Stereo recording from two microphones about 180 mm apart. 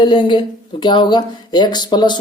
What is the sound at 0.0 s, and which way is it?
Speech, 25° left (ahead or behind).